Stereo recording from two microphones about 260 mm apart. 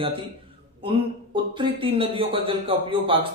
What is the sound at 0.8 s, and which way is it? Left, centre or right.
Speech, centre.